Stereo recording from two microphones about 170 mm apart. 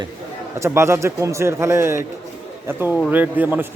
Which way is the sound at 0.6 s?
15° right (ahead or behind).